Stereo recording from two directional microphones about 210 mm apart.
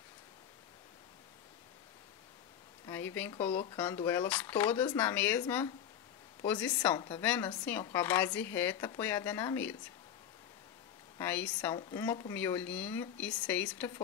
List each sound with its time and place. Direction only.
2.9 s speech: 10° left (ahead or behind)
6.4 s speech: 5° left (ahead or behind)
11.1 s speech: 10° left (ahead or behind)